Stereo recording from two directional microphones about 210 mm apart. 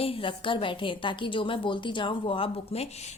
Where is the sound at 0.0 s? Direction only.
25° left (ahead or behind).